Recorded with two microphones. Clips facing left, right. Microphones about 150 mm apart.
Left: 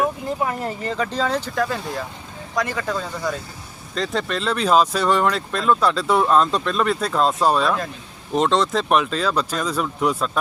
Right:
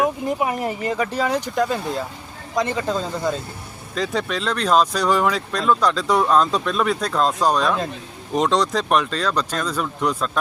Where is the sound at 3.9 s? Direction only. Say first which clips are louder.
Even; centre (ahead or behind).